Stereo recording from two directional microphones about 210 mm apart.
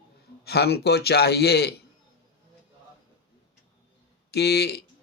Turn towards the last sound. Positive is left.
turn(degrees=50)  # may be behind; listen again after turning